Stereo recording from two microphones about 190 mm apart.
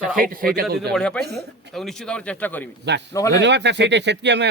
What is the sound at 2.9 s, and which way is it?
Speech, 65° right (ahead or behind).